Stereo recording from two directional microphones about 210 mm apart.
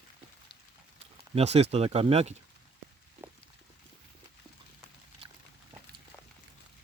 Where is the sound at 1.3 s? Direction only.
30° right (ahead or behind).